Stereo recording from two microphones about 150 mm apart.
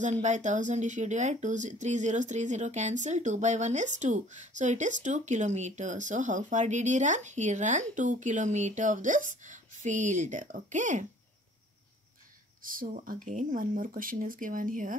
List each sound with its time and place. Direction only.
0.2 s speech: 55° right (ahead or behind)
12.6 s speech: 60° right (ahead or behind)